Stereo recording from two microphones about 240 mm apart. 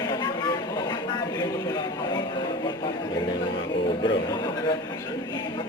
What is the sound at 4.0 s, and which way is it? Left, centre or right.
Speech, centre.